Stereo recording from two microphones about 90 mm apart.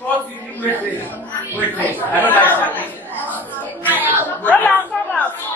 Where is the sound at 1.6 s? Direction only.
20° left (ahead or behind).